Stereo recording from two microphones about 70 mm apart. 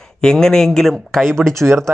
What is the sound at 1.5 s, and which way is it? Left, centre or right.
Speech, right.